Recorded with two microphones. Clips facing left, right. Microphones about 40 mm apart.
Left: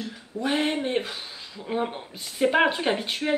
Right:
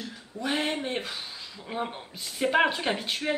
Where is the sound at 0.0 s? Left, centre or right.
Centre.